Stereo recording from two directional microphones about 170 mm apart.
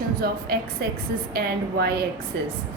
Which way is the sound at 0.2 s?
65° right (ahead or behind).